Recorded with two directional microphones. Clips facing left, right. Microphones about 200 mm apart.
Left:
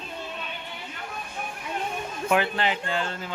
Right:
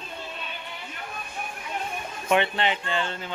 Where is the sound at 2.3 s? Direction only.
Centre (ahead or behind).